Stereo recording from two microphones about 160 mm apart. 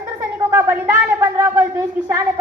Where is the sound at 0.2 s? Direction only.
15° right (ahead or behind).